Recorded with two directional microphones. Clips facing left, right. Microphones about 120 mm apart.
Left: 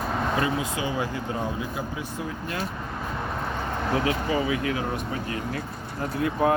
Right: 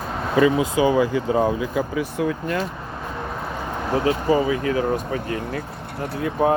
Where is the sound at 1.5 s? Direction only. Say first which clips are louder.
Right 8 dB; 90° right.